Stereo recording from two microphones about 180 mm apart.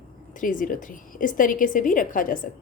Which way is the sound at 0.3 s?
45° left (ahead or behind).